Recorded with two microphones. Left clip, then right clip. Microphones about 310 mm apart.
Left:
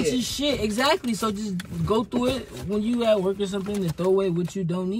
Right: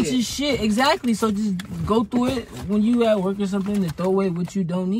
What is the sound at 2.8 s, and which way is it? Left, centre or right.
Speech, right.